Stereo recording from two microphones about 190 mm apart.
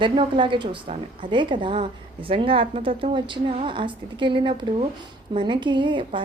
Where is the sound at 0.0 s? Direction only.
25° right (ahead or behind).